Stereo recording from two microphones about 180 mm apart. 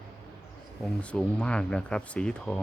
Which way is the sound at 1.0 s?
5° left (ahead or behind).